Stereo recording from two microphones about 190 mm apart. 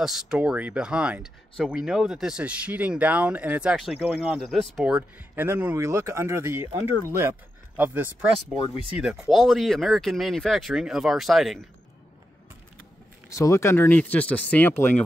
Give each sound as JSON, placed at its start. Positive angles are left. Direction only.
{"t": 0.0, "sound": "speech", "side_deg": -5}
{"t": 13.4, "sound": "speech", "side_deg": 15}